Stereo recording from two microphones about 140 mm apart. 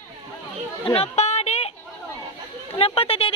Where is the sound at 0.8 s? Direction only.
40° left (ahead or behind).